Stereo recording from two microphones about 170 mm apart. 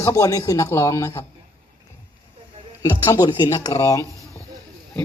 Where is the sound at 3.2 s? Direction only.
25° left (ahead or behind).